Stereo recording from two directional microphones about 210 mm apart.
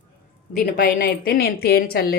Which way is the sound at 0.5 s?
45° left (ahead or behind).